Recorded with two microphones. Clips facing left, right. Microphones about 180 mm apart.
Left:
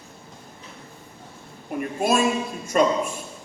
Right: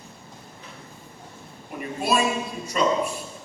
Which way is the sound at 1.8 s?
50° left (ahead or behind).